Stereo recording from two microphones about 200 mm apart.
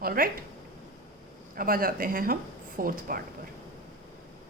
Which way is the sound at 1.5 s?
45° right (ahead or behind).